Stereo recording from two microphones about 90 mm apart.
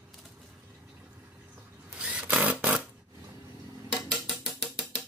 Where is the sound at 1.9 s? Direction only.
10° right (ahead or behind).